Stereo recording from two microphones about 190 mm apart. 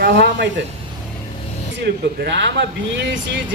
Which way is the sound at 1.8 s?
65° right (ahead or behind).